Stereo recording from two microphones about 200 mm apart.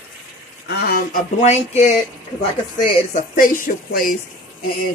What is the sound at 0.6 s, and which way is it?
Speech, 50° left (ahead or behind).